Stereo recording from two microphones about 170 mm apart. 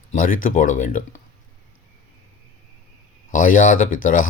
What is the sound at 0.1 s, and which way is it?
Speech, 50° left (ahead or behind).